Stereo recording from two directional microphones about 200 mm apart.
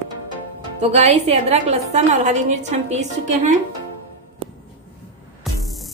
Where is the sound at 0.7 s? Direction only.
35° right (ahead or behind).